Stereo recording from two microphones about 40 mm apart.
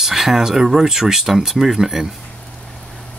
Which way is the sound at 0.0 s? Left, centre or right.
Centre.